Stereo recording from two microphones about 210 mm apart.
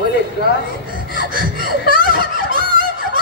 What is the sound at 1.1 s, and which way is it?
Laughter, 40° right (ahead or behind).